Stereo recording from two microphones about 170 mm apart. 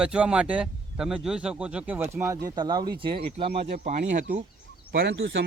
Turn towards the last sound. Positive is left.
turn(degrees=-90)